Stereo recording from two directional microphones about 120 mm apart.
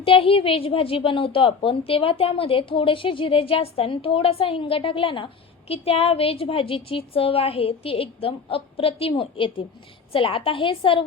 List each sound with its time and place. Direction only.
0.0 s a woman's voice: 50° left (ahead or behind)